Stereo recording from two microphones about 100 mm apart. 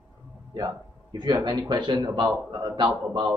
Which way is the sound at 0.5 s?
45° right (ahead or behind).